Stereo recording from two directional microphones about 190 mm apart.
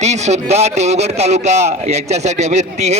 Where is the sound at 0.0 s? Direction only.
35° right (ahead or behind).